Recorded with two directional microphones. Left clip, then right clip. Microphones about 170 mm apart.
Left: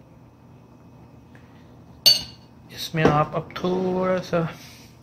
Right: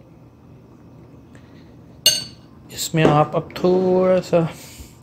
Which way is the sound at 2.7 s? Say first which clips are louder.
Right 4 dB; 25° right (ahead or behind).